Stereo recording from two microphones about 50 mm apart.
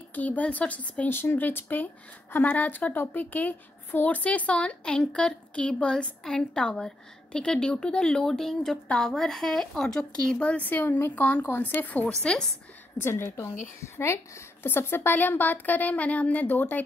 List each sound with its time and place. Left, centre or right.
0.1 s a woman's voice: left
1.0 s a woman's voice: left; by 10.3 s centre
10.4 s a woman's voice: left
12.1 s a woman's voice: centre
13.0 s a woman's voice: left